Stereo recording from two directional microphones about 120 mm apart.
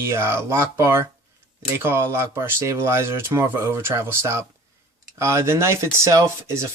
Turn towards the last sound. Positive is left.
turn(degrees=-25)  # may be behind; listen again after turning